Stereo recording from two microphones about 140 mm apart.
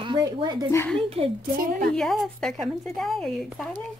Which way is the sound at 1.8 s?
5° left (ahead or behind).